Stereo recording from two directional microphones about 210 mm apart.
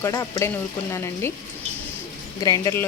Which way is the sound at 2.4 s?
15° left (ahead or behind).